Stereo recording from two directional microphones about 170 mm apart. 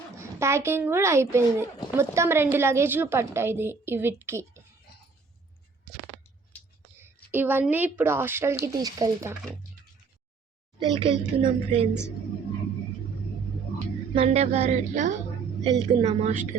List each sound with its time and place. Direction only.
0.2 s a woman's voice: 15° right (ahead or behind)
6.9 s a woman's voice: 15° right (ahead or behind)
10.8 s a woman's voice: 30° right (ahead or behind)
14.2 s a woman's voice: 40° right (ahead or behind)
15.6 s a woman's voice: 35° right (ahead or behind)